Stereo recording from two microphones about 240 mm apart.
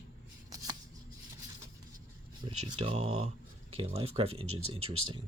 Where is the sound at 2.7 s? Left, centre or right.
Right.